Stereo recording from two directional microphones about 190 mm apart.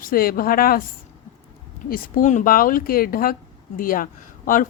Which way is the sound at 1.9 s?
45° left (ahead or behind).